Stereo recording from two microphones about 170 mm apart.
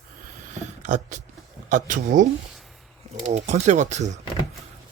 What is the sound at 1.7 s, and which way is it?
Speech, 50° right (ahead or behind).